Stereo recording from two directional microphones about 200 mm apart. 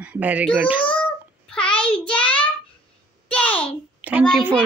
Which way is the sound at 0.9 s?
5° left (ahead or behind).